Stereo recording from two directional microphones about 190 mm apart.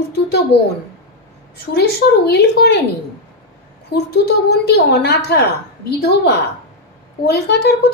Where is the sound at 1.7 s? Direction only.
60° left (ahead or behind).